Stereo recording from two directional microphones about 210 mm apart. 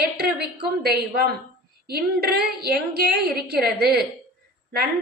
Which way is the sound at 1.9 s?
50° right (ahead or behind).